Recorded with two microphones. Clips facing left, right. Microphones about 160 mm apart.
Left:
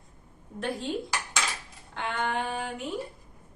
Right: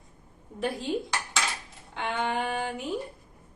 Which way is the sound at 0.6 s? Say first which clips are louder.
Right 2 dB; centre (ahead or behind).